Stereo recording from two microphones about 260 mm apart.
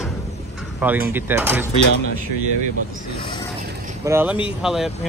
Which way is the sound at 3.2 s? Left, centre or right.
Centre.